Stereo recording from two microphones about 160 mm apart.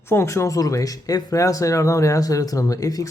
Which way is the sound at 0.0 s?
15° left (ahead or behind).